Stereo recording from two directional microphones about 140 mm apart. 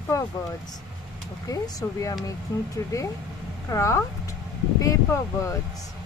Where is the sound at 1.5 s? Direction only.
25° left (ahead or behind).